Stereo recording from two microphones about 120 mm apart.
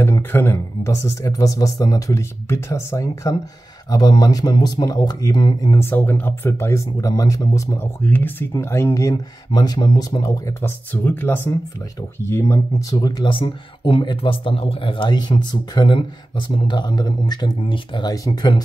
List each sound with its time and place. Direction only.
0.0 s speech: 20° left (ahead or behind); by 5.7 s 40° left (ahead or behind)
5.7 s speech: 20° left (ahead or behind)
10.6 s speech: 15° left (ahead or behind); by 18.6 s 35° left (ahead or behind)